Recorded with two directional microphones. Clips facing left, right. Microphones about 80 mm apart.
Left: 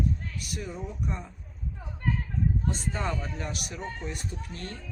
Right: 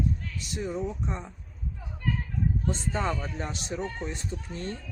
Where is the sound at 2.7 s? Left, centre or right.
Right.